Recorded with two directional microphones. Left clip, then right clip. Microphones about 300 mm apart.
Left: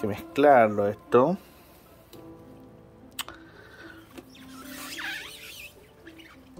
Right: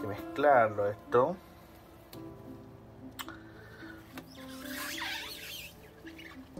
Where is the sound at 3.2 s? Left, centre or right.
Left.